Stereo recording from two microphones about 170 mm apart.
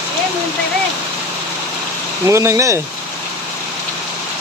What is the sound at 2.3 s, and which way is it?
Speech, 15° right (ahead or behind).